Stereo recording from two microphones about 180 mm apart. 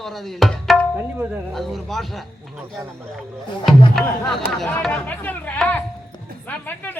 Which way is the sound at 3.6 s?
Centre (ahead or behind).